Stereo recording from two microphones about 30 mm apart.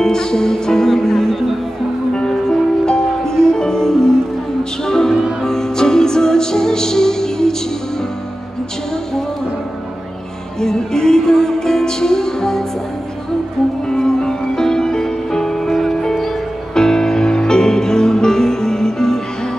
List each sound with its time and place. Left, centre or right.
0.0 s music: left
2.8 s music: left
10.6 s music: left
13.8 s music: left